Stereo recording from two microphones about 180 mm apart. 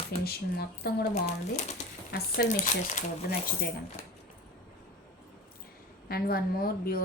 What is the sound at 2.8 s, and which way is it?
Speech, 40° left (ahead or behind).